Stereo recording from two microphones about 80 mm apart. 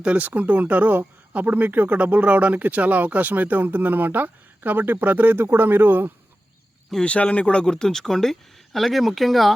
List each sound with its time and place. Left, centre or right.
0.0 s speech: centre
6.9 s speech: centre